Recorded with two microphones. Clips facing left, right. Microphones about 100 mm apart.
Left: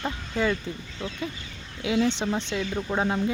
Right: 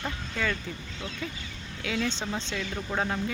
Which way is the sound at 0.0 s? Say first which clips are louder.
Left 5 dB; 20° left (ahead or behind).